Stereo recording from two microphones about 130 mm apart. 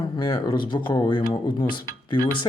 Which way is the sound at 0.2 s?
35° left (ahead or behind).